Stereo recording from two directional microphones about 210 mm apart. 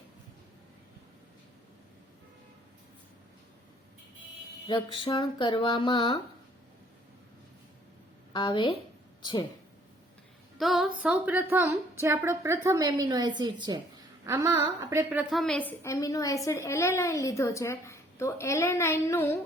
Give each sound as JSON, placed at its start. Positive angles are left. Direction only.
{"t": 4.6, "sound": "speech", "side_deg": 25}
{"t": 8.3, "sound": "a woman's voice", "side_deg": 20}
{"t": 10.6, "sound": "a woman's voice", "side_deg": 0}
{"t": 15.3, "sound": "a woman's voice", "side_deg": 0}